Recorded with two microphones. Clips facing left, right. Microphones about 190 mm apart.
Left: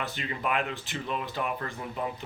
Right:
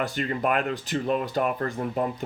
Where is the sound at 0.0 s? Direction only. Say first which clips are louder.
Right 7 dB; 45° right (ahead or behind).